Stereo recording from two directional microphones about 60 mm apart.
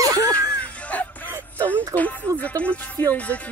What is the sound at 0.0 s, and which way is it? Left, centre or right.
Music, right.